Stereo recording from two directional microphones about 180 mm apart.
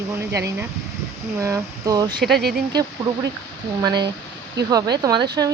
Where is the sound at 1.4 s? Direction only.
20° right (ahead or behind).